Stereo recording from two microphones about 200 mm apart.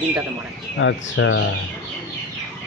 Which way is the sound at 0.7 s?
70° left (ahead or behind).